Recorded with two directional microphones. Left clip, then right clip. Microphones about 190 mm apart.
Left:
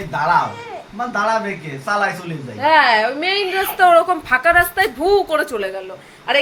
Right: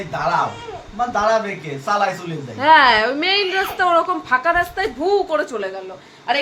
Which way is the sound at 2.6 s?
35° right (ahead or behind).